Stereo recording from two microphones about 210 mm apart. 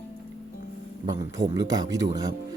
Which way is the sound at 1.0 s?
15° right (ahead or behind).